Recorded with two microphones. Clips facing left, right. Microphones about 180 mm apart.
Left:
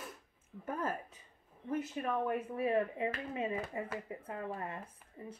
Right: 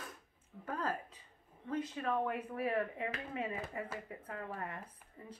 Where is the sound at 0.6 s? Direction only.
25° left (ahead or behind).